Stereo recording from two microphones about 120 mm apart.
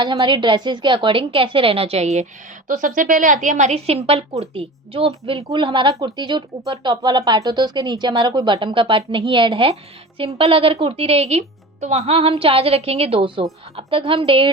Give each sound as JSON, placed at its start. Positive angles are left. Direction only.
{"t": 0.0, "sound": "speech", "side_deg": -40}
{"t": 2.6, "sound": "a woman's voice", "side_deg": -90}
{"t": 5.5, "sound": "speech", "side_deg": -40}